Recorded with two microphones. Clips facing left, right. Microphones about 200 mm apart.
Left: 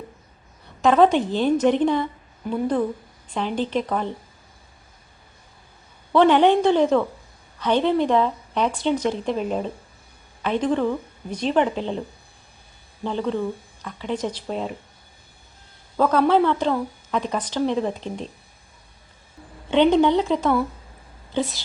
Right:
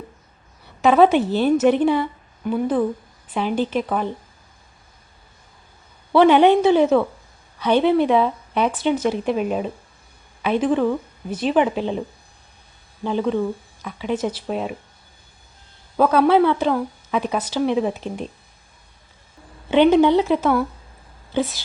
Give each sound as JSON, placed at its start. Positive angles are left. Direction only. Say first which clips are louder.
{"t": 0.8, "sound": "a woman's voice", "louder": "right 2 dB", "side_deg": -5}
{"t": 6.1, "sound": "a woman's voice", "louder": "right 3 dB", "side_deg": -10}
{"t": 13.1, "sound": "a woman's voice", "louder": "right 3 dB", "side_deg": -10}
{"t": 16.0, "sound": "a woman's voice", "louder": "right 3 dB", "side_deg": -10}
{"t": 19.7, "sound": "a woman's voice", "louder": "right 3 dB", "side_deg": -5}